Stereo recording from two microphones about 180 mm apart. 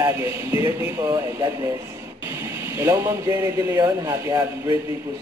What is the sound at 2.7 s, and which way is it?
Speech, 15° right (ahead or behind).